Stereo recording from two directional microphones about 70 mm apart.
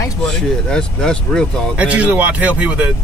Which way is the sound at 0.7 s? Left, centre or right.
Centre.